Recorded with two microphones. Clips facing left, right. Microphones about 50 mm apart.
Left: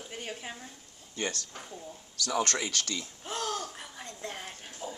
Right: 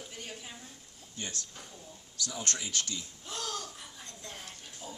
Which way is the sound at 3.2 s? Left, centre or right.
Left.